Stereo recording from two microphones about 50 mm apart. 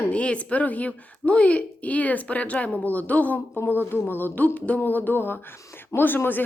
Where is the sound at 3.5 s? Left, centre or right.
Left.